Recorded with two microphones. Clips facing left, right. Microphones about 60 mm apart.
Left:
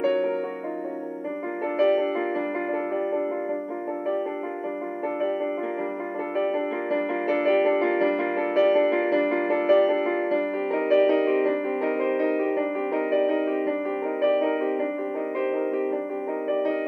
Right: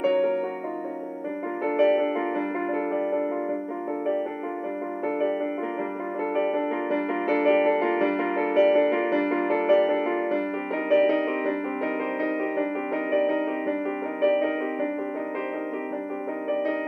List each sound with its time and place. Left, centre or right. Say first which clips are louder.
1.8 s music: even; right
6.3 s music: even; right
9.2 s music: left 1 dB; right